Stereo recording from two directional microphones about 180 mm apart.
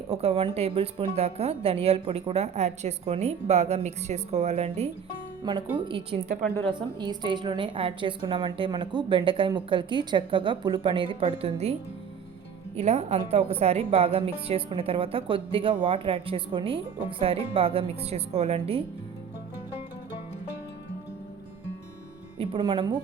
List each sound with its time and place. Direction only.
0.1 s a woman's voice: 35° right (ahead or behind)
6.2 s a woman's voice: 55° right (ahead or behind)
6.7 s a woman's voice: 25° right (ahead or behind)
22.4 s a woman's voice: 30° right (ahead or behind)